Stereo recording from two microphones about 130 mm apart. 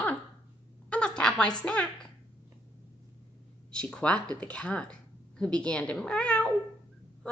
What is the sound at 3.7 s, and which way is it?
A woman's voice, 5° left (ahead or behind).